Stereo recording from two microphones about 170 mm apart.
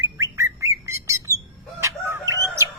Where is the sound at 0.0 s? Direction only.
15° right (ahead or behind).